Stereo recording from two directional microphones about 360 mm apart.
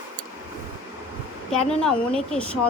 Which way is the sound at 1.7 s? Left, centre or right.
Centre.